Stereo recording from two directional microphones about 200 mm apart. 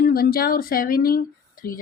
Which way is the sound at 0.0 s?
50° left (ahead or behind).